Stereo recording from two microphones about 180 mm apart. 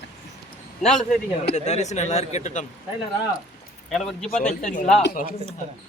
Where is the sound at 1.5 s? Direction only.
40° left (ahead or behind).